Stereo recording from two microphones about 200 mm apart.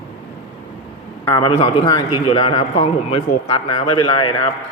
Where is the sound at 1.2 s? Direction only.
25° left (ahead or behind).